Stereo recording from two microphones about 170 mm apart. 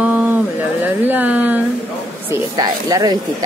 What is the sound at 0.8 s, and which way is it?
Speech, 10° right (ahead or behind).